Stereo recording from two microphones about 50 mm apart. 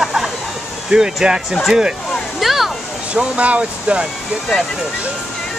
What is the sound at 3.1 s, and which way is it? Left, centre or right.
Speech, right.